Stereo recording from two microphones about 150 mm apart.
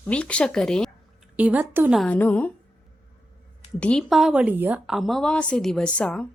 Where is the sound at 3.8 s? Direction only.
5° left (ahead or behind).